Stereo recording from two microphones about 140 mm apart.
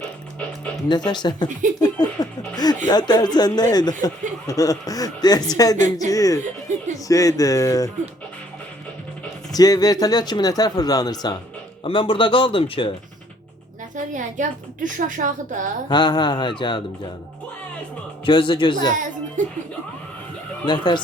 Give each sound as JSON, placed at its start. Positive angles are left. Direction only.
{"t": 0.9, "sound": "speech", "side_deg": 30}
{"t": 1.8, "sound": "a sound", "side_deg": 30}
{"t": 2.9, "sound": "speech", "side_deg": 30}
{"t": 5.7, "sound": "a woman's voice", "side_deg": -60}
{"t": 6.1, "sound": "speech", "side_deg": 25}
{"t": 9.5, "sound": "speech", "side_deg": 25}
{"t": 11.8, "sound": "speech", "side_deg": 40}
{"t": 13.9, "sound": "a woman's voice", "side_deg": -65}
{"t": 15.9, "sound": "speech", "side_deg": 30}
{"t": 18.3, "sound": "speech", "side_deg": 35}
{"t": 19.4, "sound": "a woman's voice", "side_deg": -65}
{"t": 20.7, "sound": "speech", "side_deg": 35}